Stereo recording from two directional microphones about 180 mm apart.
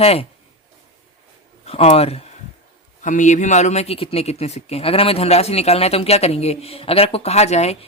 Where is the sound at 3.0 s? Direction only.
45° left (ahead or behind).